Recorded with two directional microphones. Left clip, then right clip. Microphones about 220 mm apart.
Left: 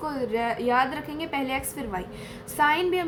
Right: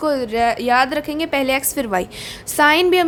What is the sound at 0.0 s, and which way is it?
A woman's voice, 45° right (ahead or behind).